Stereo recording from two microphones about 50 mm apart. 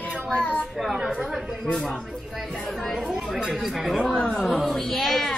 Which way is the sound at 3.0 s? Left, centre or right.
Centre.